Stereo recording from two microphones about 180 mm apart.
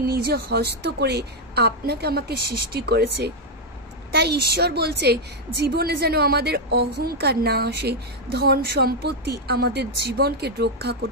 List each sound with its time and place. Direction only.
0.0 s a woman's voice: 60° right (ahead or behind)